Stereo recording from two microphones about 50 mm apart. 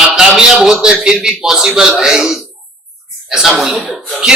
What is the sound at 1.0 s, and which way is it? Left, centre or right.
Speech, centre.